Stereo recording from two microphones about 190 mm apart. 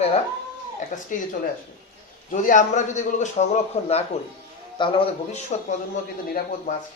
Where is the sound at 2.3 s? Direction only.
40° left (ahead or behind).